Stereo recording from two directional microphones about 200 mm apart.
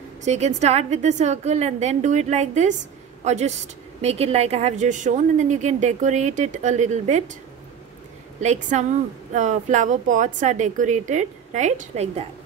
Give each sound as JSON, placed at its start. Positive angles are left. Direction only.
{"t": 0.2, "sound": "a woman's voice", "side_deg": -35}
{"t": 8.4, "sound": "a woman's voice", "side_deg": -35}